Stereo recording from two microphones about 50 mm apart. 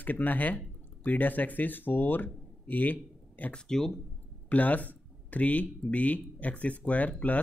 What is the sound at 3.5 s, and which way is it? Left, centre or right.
Speech, centre.